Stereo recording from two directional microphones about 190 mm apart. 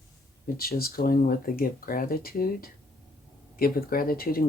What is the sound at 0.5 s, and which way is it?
Speech, 50° left (ahead or behind).